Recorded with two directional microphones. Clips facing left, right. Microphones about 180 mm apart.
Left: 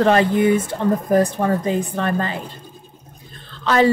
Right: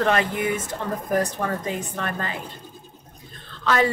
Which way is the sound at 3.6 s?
30° left (ahead or behind).